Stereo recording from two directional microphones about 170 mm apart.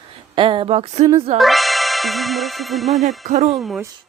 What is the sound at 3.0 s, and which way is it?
Music, 45° right (ahead or behind).